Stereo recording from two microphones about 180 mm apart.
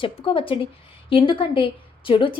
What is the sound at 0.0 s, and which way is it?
A woman's voice, 30° left (ahead or behind).